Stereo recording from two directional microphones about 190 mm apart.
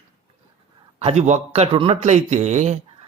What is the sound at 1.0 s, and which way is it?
A man's voice, 35° right (ahead or behind).